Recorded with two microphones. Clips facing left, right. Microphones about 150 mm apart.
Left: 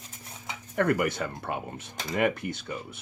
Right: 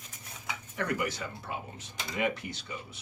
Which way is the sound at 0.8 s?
55° left (ahead or behind).